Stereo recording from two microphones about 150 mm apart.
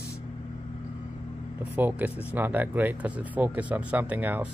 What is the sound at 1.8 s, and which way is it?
Speech, 10° right (ahead or behind).